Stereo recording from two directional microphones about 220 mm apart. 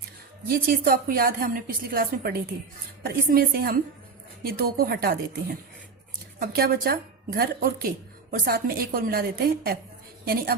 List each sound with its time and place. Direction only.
0.4 s a woman's voice: 40° right (ahead or behind)